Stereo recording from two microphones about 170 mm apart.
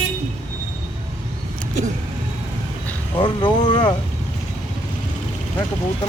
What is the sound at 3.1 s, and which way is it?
Speech, 25° left (ahead or behind).